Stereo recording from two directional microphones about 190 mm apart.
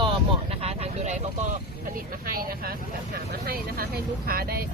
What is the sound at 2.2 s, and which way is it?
Speech, 50° right (ahead or behind).